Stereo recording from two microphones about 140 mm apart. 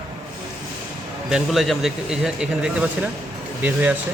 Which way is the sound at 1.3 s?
Centre (ahead or behind).